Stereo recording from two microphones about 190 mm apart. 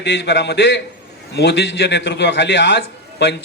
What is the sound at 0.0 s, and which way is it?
A man's voice, 65° left (ahead or behind).